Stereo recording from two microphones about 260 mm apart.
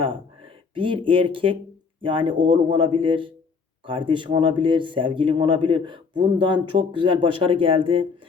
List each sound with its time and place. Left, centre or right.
0.7 s speech: centre